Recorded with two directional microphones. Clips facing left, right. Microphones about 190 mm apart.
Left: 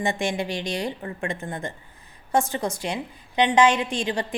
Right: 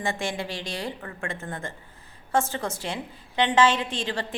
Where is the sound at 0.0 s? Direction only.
15° left (ahead or behind).